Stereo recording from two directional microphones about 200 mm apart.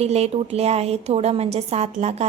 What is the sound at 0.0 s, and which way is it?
A woman's voice, 30° right (ahead or behind).